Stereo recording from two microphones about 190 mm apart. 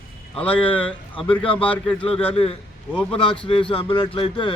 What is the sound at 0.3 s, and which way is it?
Speech, 5° left (ahead or behind).